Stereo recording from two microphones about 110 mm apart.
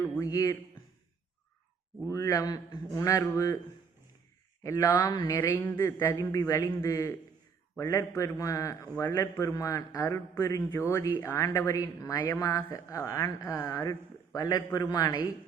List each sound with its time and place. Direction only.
0.2 s a man's voice: 35° left (ahead or behind)
2.0 s a man's voice: 30° left (ahead or behind)
4.6 s a man's voice: 30° left (ahead or behind)
5.4 s a man's voice: 20° left (ahead or behind)